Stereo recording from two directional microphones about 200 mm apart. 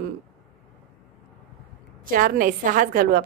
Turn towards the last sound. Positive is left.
turn(degrees=-45)  # may be behind; listen again after turning